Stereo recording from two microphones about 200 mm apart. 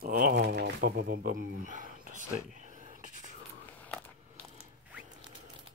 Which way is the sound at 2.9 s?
40° right (ahead or behind).